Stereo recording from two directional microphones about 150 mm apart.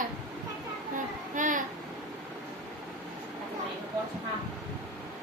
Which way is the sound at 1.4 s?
60° right (ahead or behind).